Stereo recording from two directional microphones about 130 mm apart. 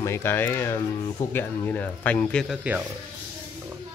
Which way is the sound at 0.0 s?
20° left (ahead or behind).